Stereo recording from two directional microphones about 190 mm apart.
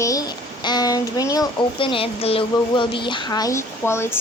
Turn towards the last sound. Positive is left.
turn(degrees=15)  # may be behind; listen again after turning